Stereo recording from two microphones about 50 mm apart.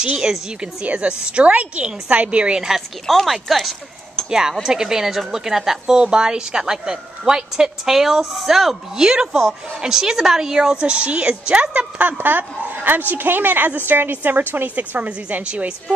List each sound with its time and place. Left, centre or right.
0.0 s a woman's voice: centre
3.1 s speech: centre
4.3 s a woman's voice: centre; by 15.7 s right